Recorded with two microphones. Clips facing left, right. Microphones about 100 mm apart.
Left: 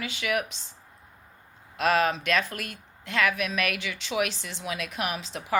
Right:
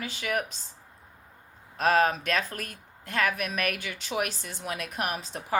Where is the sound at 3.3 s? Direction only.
40° right (ahead or behind).